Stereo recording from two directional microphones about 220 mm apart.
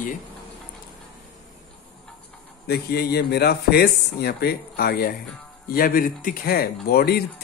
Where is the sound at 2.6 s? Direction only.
45° left (ahead or behind).